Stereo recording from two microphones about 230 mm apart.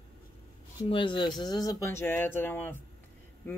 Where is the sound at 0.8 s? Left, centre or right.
Left.